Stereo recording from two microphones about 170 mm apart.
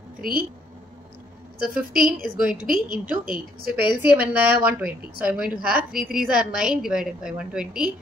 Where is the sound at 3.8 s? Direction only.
10° right (ahead or behind).